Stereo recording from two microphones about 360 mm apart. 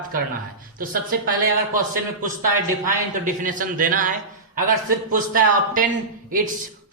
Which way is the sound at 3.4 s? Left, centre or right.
Right.